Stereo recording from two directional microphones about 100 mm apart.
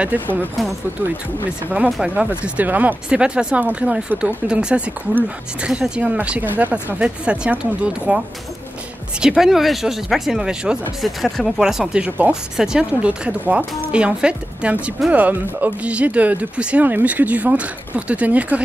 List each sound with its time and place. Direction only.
0.0 s a woman's voice: 20° right (ahead or behind)
2.0 s a woman's voice: 10° right (ahead or behind)
9.4 s a woman's voice: centre (ahead or behind)